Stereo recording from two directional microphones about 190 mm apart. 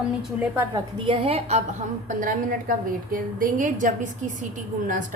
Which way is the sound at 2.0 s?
45° right (ahead or behind).